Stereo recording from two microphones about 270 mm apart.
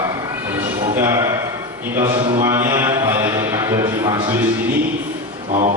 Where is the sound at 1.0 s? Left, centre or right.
Centre.